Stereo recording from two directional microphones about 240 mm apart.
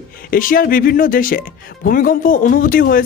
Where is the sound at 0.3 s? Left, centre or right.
Left.